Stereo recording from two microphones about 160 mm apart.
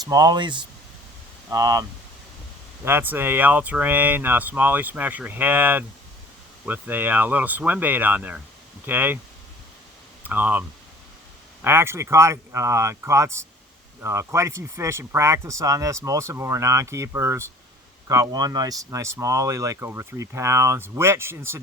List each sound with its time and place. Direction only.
0.1 s speech: 25° right (ahead or behind)
2.8 s speech: 15° right (ahead or behind)
10.2 s speech: 10° right (ahead or behind)